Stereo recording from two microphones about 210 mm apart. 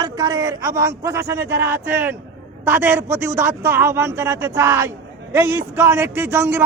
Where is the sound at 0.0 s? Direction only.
15° right (ahead or behind).